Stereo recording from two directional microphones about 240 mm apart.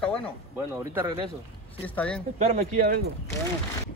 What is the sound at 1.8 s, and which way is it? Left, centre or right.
Speech, centre.